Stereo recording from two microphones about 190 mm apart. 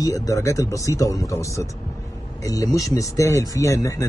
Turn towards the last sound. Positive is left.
turn(degrees=15)  # may be behind; listen again after turning